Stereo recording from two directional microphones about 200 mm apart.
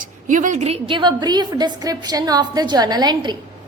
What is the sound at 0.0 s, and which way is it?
A woman's voice, 40° right (ahead or behind).